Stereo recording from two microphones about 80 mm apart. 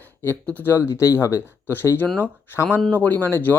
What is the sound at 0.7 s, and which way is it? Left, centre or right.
Speech, left.